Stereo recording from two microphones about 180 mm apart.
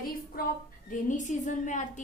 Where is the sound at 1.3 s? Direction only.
45° left (ahead or behind).